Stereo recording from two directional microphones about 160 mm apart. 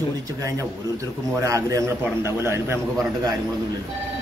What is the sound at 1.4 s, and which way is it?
A man's voice, 20° right (ahead or behind).